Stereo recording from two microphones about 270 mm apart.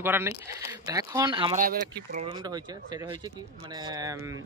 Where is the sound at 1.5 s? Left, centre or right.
Right.